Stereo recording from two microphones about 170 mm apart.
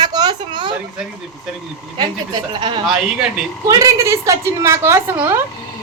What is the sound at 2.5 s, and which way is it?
Speech, 30° right (ahead or behind).